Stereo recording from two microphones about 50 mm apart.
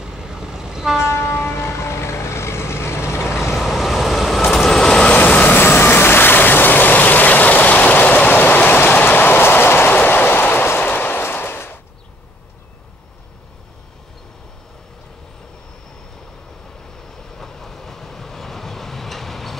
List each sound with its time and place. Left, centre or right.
0.0 s vehicle: centre
1.1 s train: left
3.5 s vehicle: centre
4.6 s vehicle: centre
5.1 s vehicle: left
10.0 s a sound: left
17.4 s train: centre